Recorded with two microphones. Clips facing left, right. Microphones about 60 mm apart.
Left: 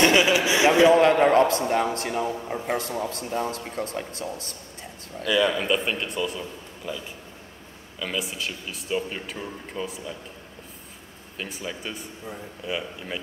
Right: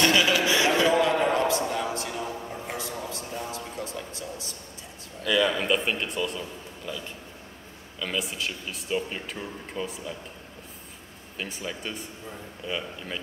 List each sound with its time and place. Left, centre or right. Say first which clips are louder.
0.0 s a sound: left 3 dB; left
0.9 s a man's voice: left 6 dB; left
5.2 s a man's voice: left 2 dB; centre
11.3 s speech: left 1 dB; centre